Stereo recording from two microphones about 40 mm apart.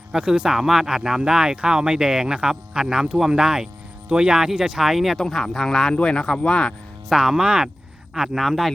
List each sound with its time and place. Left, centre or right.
0.1 s speech: right
0.5 s speech: centre
5.9 s speech: left
7.1 s speech: centre
8.1 s speech: centre